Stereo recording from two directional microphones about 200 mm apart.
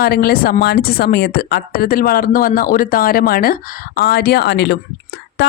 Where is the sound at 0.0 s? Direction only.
50° left (ahead or behind).